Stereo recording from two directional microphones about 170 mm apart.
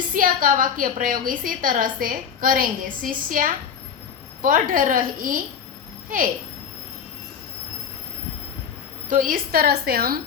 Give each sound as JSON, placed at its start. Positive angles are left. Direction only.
{"t": 0.1, "sound": "a woman's voice", "side_deg": -55}
{"t": 9.0, "sound": "a woman's voice", "side_deg": -55}